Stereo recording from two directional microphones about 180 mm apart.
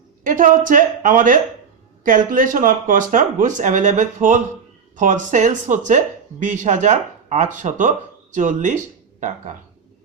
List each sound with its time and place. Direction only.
0.3 s speech: 50° right (ahead or behind)